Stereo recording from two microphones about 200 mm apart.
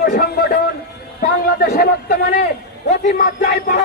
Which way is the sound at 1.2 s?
50° left (ahead or behind).